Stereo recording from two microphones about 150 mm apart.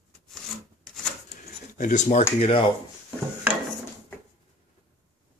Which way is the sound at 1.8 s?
55° left (ahead or behind).